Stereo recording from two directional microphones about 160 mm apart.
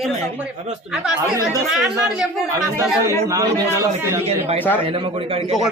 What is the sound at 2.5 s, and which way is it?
A man's voice, 20° right (ahead or behind).